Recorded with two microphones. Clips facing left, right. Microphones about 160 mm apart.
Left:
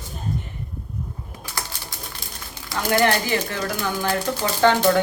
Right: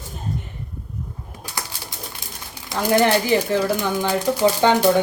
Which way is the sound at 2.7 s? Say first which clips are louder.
Right 4 dB; 20° right (ahead or behind).